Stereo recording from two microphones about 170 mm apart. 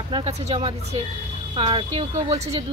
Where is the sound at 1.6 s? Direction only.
30° right (ahead or behind).